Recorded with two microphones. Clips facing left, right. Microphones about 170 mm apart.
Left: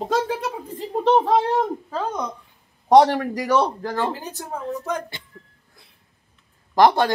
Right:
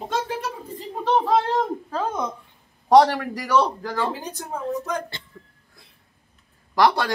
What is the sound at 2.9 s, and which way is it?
A man's voice, 20° left (ahead or behind).